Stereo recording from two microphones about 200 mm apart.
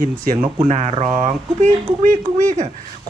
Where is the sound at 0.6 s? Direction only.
35° right (ahead or behind).